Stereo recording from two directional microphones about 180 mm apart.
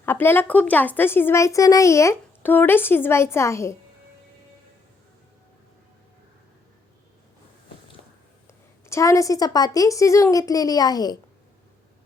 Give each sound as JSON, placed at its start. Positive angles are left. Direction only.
{"t": 0.0, "sound": "speech", "side_deg": 10}
{"t": 8.9, "sound": "speech", "side_deg": 15}